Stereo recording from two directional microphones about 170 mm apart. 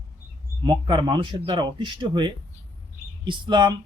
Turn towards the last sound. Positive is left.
turn(degrees=-25)  # may be behind; listen again after turning